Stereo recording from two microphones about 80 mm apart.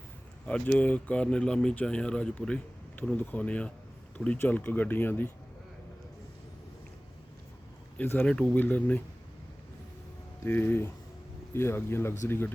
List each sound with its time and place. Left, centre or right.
0.4 s speech: centre
7.9 s speech: left
8.2 s speech: centre
8.5 s speech: left
10.4 s speech: left